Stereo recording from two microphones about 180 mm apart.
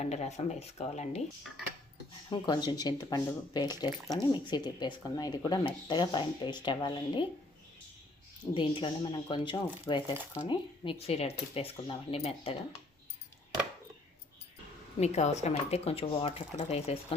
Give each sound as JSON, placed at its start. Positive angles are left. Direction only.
{"t": 0.0, "sound": "speech", "side_deg": 40}
{"t": 2.3, "sound": "speech", "side_deg": 25}
{"t": 8.5, "sound": "speech", "side_deg": 30}
{"t": 15.0, "sound": "speech", "side_deg": 40}